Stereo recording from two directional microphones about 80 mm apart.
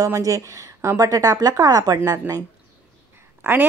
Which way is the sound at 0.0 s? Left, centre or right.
Right.